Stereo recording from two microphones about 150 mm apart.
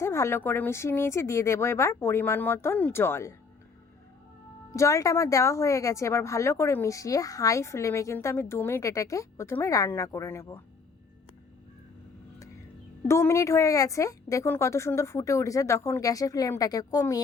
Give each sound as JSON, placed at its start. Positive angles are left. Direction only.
{"t": 0.0, "sound": "a woman's voice", "side_deg": 20}
{"t": 4.7, "sound": "speech", "side_deg": 20}
{"t": 13.1, "sound": "speech", "side_deg": 20}